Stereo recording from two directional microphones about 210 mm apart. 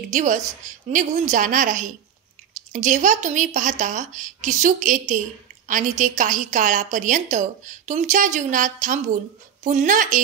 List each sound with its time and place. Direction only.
0.1 s a woman's voice: 35° right (ahead or behind)